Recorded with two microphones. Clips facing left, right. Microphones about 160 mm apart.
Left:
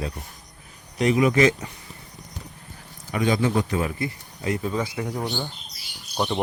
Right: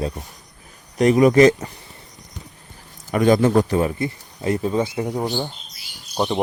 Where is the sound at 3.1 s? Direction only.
45° right (ahead or behind); by 5.3 s 25° right (ahead or behind).